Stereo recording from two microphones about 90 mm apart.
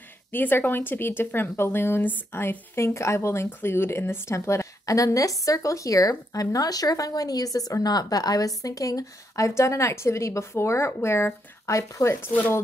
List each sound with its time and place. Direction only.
0.3 s a woman's voice: 25° left (ahead or behind)